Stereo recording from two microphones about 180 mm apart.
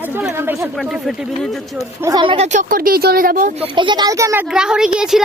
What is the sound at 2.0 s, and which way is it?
Speech, 20° right (ahead or behind).